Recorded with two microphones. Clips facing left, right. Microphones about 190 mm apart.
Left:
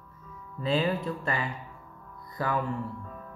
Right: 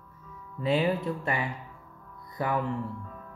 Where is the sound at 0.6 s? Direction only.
15° right (ahead or behind).